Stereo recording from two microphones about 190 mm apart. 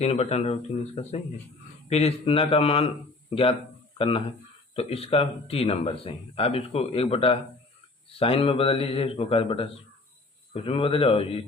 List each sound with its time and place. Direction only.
0.0 s speech: 35° left (ahead or behind)
1.9 s speech: 35° left (ahead or behind)
3.9 s a man's voice: 30° left (ahead or behind)